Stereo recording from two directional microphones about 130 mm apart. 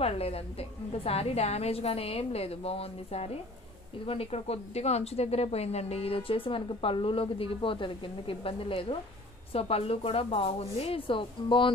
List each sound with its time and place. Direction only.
0.0 s speech: 50° left (ahead or behind)